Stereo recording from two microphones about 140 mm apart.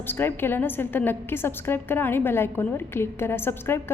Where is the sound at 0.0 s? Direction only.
15° left (ahead or behind).